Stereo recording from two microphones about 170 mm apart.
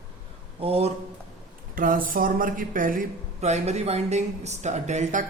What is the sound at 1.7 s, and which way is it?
Speech, 55° right (ahead or behind).